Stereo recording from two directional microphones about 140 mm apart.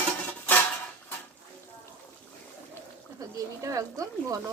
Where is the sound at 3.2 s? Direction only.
25° right (ahead or behind).